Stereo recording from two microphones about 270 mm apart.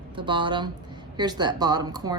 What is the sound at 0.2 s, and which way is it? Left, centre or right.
Speech, centre.